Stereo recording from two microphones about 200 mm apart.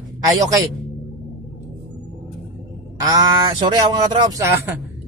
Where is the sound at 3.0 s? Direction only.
20° right (ahead or behind).